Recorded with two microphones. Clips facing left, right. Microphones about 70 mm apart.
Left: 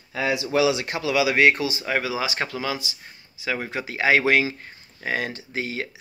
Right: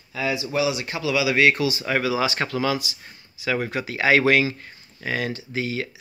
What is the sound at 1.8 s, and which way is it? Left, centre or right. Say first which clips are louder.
Speech: right 2 dB; centre.